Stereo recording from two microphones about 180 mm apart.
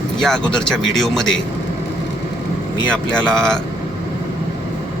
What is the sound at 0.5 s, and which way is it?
Speech, 5° left (ahead or behind).